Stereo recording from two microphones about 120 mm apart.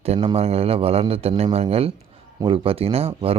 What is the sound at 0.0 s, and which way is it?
A man's voice, 60° right (ahead or behind).